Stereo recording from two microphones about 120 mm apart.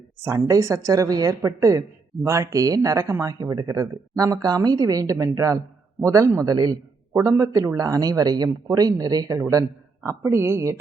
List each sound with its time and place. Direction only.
0.2 s speech: 25° right (ahead or behind)